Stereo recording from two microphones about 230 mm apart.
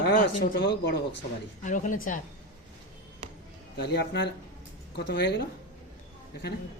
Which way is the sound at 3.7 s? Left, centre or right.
Left.